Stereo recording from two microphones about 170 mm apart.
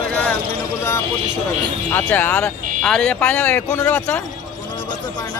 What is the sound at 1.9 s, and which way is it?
Speech, 10° left (ahead or behind).